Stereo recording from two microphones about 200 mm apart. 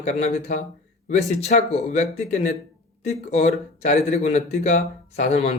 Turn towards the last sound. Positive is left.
turn(degrees=35)  # may be behind; listen again after turning